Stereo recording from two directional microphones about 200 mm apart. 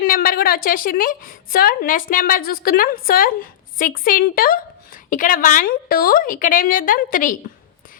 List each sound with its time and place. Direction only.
0.0 s a woman's voice: 45° left (ahead or behind)